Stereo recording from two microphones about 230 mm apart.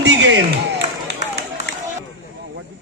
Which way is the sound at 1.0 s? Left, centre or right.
Right.